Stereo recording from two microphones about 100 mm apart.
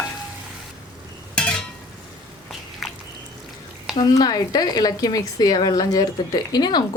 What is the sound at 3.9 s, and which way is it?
A woman's voice, 40° left (ahead or behind).